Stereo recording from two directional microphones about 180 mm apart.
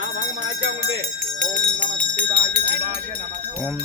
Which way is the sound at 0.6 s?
90° right.